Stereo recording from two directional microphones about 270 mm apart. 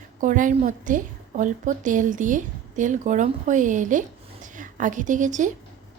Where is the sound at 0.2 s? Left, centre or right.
Right.